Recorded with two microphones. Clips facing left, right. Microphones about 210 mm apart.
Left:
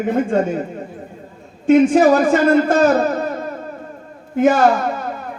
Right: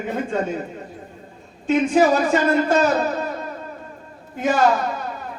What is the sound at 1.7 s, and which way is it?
Speech, 50° left (ahead or behind).